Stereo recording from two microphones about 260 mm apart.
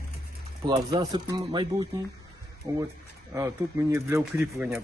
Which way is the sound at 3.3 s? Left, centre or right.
Centre.